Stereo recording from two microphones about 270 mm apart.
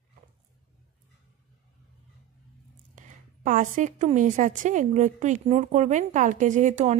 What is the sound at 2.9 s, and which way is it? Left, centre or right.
A woman's voice, right.